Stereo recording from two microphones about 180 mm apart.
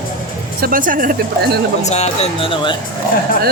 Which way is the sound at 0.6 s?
50° right (ahead or behind).